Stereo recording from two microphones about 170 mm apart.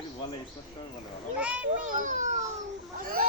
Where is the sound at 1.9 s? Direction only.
50° right (ahead or behind).